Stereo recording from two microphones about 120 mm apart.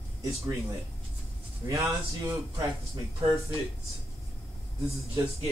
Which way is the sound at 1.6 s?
25° right (ahead or behind).